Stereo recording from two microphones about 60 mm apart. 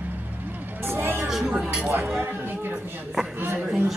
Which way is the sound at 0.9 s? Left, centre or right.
Right.